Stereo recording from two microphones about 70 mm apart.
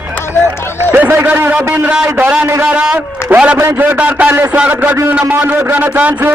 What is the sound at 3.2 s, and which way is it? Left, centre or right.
Speech, left.